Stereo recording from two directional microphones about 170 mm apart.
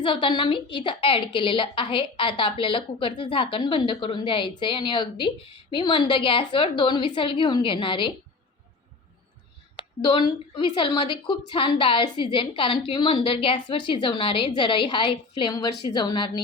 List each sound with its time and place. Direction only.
0.0 s a woman's voice: 30° left (ahead or behind)
9.7 s a woman's voice: 30° left (ahead or behind)